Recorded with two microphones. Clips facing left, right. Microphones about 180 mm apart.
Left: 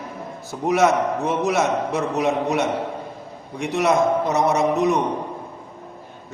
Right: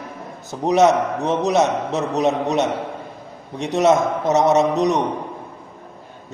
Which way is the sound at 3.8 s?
20° right (ahead or behind).